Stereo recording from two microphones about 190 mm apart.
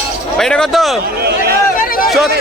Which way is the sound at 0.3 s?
5° left (ahead or behind).